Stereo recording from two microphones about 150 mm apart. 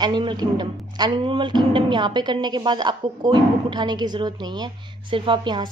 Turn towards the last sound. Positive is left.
turn(degrees=-30)  # may be behind; listen again after turning